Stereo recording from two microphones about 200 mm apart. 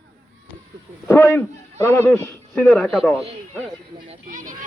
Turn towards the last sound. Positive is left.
turn(degrees=-40)  # may be behind; listen again after turning